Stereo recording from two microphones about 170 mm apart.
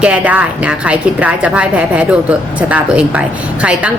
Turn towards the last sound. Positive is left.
turn(degrees=-10)  # may be behind; listen again after turning